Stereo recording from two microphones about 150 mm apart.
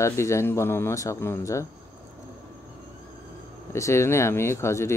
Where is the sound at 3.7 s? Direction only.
20° left (ahead or behind).